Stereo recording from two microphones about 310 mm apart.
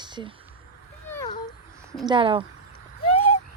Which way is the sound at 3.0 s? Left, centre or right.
Left.